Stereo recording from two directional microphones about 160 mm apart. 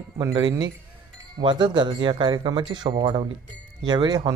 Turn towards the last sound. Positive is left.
turn(degrees=-25)  # may be behind; listen again after turning